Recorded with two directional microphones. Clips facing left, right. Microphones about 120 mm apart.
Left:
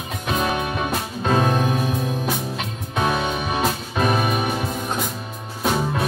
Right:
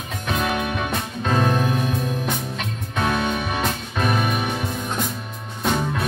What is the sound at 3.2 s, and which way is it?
Music, 15° left (ahead or behind).